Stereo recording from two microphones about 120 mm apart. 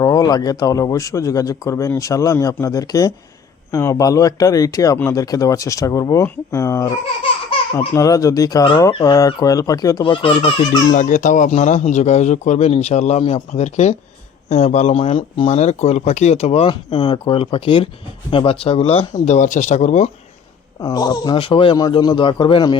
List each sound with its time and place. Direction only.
0.0 s speech: 35° left (ahead or behind)
10.0 s speech: 45° left (ahead or behind)
10.9 s a man's voice: 90° left; by 15.5 s 50° left (ahead or behind)
15.5 s speech: 65° left (ahead or behind)
20.8 s a man's voice: 35° left (ahead or behind)
21.8 s a man's voice: 35° left (ahead or behind)